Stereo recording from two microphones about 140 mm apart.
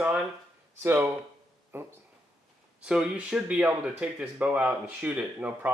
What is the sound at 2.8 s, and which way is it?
Speech, 5° right (ahead or behind).